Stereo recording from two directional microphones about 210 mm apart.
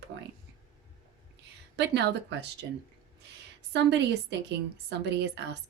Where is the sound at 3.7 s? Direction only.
55° right (ahead or behind).